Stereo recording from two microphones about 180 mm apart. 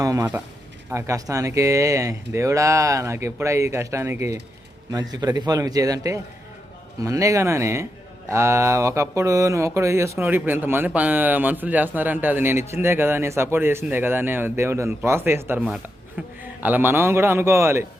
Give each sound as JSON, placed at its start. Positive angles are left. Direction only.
{"t": 0.0, "sound": "a man's voice", "side_deg": -20}